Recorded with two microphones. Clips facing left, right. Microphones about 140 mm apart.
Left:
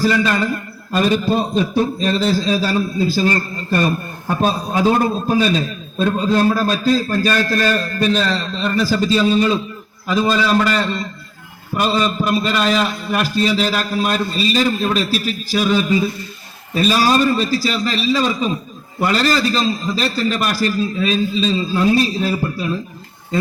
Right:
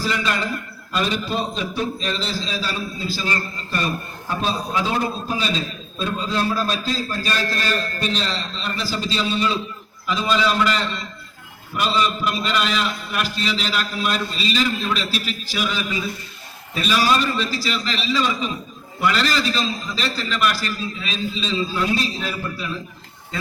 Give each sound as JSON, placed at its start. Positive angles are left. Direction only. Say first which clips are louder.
{"t": 0.0, "sound": "a man's voice", "louder": "left 7 dB", "side_deg": 45}